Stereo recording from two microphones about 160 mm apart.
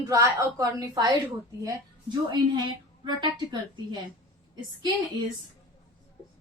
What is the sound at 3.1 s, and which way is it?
Speech, 30° right (ahead or behind).